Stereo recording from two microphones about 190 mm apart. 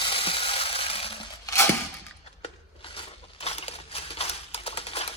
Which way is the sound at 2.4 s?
30° left (ahead or behind).